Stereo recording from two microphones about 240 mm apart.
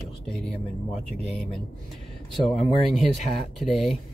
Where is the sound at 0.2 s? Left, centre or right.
Centre.